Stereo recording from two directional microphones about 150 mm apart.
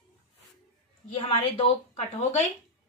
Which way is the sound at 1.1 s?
40° left (ahead or behind).